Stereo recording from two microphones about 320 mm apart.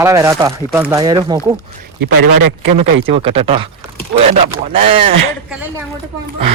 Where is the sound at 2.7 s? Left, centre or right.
Centre.